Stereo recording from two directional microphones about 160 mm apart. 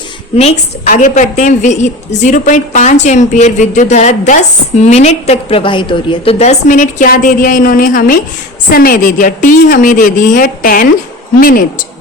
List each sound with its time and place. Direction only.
0.3 s a woman's voice: 45° left (ahead or behind); by 11.6 s 65° left (ahead or behind)